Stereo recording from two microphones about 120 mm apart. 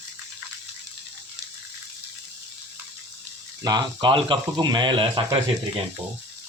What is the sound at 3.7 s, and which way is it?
Speech, 35° right (ahead or behind).